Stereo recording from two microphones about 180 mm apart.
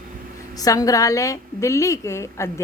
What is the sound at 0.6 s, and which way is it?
A woman's voice, 20° left (ahead or behind).